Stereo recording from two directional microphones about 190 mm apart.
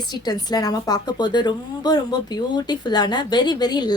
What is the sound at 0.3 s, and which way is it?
A woman's voice, 20° left (ahead or behind).